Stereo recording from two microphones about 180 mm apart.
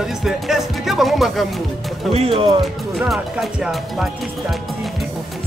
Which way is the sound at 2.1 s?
30° right (ahead or behind).